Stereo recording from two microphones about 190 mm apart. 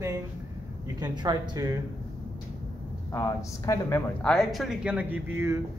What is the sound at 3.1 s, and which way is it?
Speech, 15° left (ahead or behind).